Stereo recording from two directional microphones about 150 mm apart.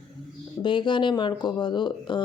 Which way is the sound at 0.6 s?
30° left (ahead or behind).